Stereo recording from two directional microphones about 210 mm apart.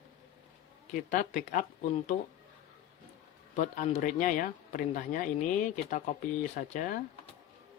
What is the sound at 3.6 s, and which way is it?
Speech, 35° left (ahead or behind).